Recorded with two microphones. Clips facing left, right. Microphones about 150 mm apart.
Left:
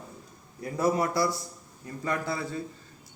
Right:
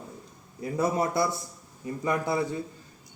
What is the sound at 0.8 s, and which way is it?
A man's voice, 20° right (ahead or behind).